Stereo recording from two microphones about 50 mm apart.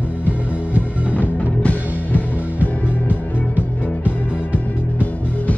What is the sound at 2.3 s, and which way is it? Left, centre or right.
Music, right.